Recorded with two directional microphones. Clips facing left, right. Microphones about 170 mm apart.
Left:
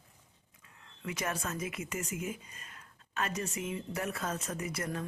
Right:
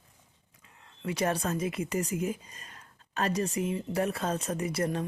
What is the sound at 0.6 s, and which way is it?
Speech, 25° right (ahead or behind).